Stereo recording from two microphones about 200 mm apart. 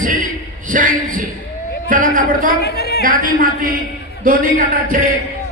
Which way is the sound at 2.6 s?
55° left (ahead or behind).